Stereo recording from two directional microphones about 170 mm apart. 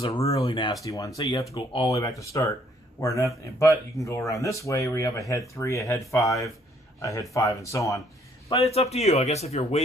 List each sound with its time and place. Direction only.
0.2 s speech: 20° left (ahead or behind)
8.4 s speech: 35° left (ahead or behind)